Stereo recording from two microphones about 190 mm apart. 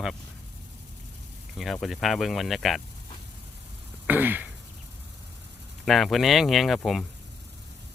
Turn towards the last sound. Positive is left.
turn(degrees=0)  # may be behind; listen again after turning